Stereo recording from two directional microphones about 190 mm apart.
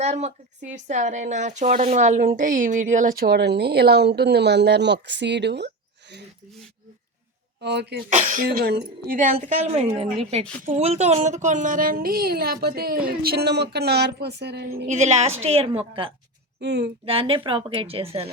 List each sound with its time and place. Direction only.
0.0 s speech: 35° right (ahead or behind); by 6.2 s 65° right (ahead or behind)
7.6 s speech: 65° right (ahead or behind)
8.1 s a woman's voice: 40° right (ahead or behind); by 14.8 s 60° right (ahead or behind)
14.8 s a woman's voice: 35° right (ahead or behind)
16.6 s speech: 60° right (ahead or behind)
17.1 s speech: 30° right (ahead or behind)